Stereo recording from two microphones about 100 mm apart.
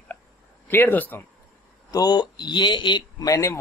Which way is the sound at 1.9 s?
40° left (ahead or behind).